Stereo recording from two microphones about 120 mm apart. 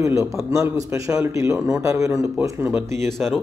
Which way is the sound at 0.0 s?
25° right (ahead or behind).